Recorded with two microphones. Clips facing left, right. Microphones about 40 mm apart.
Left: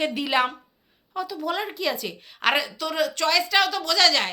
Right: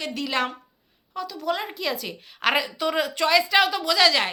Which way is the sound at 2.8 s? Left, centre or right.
Centre.